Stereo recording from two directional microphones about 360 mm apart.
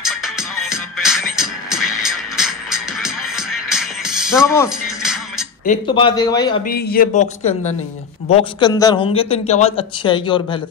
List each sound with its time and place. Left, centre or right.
0.0 s music: centre
5.7 s a man's voice: centre
6.6 s a man's voice: left